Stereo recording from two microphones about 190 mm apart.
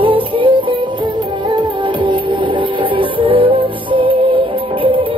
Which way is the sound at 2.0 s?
25° right (ahead or behind).